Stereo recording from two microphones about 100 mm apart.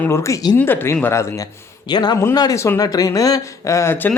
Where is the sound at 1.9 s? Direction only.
45° left (ahead or behind).